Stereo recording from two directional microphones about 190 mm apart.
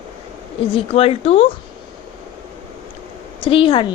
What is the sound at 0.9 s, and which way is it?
Speech, 30° left (ahead or behind).